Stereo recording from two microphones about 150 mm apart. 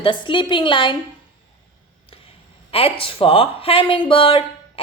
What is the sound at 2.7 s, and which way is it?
A woman's voice, 40° left (ahead or behind).